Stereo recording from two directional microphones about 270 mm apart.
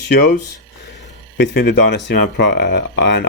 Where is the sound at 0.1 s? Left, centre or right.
Left.